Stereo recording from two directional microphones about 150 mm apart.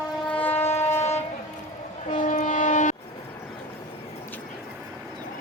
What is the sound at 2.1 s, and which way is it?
Train, 55° left (ahead or behind).